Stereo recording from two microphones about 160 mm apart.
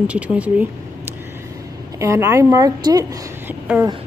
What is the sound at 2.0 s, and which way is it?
Speech, 20° right (ahead or behind).